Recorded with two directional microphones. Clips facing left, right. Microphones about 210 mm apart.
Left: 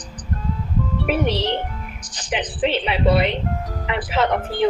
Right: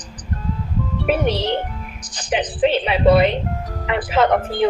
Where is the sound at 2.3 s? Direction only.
45° right (ahead or behind).